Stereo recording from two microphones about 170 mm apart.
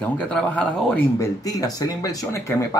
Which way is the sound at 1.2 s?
20° left (ahead or behind).